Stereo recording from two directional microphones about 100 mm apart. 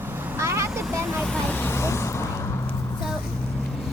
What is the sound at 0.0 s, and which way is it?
Vehicle, 20° right (ahead or behind).